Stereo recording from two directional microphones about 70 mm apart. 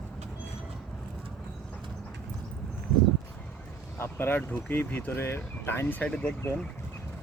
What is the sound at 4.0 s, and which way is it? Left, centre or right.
Vehicle, left.